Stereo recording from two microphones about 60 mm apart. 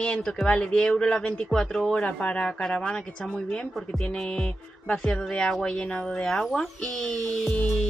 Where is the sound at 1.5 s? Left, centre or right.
Centre.